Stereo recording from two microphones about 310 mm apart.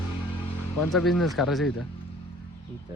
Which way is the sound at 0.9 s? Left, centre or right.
Centre.